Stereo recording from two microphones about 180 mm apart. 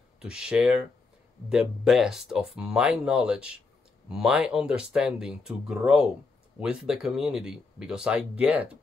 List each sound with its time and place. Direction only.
0.2 s speech: 5° right (ahead or behind)